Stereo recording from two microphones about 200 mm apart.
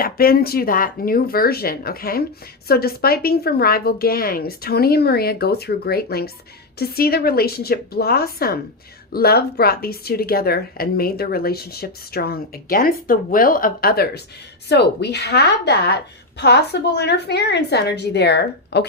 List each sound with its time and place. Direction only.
0.0 s a woman's voice: 50° left (ahead or behind)